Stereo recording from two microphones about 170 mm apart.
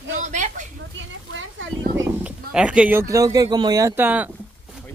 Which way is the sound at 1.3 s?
90° right.